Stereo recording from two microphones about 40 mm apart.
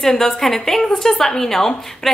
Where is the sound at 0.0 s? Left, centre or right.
Centre.